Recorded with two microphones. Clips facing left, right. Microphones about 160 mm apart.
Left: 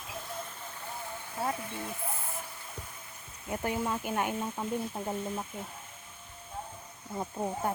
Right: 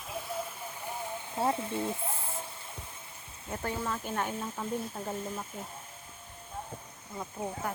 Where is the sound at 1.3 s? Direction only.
25° right (ahead or behind).